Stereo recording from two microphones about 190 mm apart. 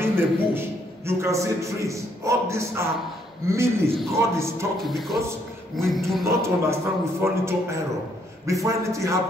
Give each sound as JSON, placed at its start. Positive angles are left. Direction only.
{"t": 0.0, "sound": "a man's voice", "side_deg": -10}
{"t": 4.7, "sound": "speech", "side_deg": 0}
{"t": 6.2, "sound": "a man's voice", "side_deg": -15}